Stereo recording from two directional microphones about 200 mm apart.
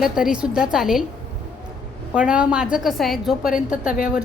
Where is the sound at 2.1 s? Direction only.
5° right (ahead or behind).